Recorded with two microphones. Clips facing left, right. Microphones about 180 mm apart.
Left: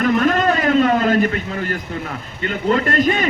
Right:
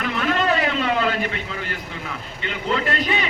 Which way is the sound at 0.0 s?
45° left (ahead or behind).